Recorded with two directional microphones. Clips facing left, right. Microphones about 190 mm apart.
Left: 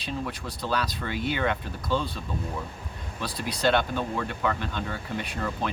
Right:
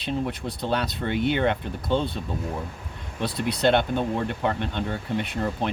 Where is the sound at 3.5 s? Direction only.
25° right (ahead or behind).